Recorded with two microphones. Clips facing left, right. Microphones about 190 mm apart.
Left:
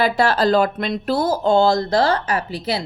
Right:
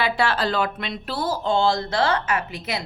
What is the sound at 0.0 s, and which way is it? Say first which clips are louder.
Speech: left 5 dB; 40° left (ahead or behind).